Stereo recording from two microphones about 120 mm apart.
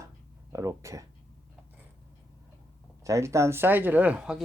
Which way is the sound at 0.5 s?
25° right (ahead or behind).